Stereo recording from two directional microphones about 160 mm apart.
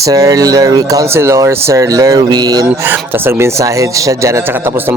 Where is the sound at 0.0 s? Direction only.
20° right (ahead or behind).